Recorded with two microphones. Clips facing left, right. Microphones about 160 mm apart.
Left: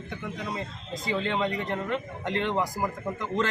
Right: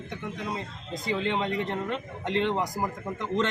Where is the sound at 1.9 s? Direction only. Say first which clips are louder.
Even; 25° right (ahead or behind).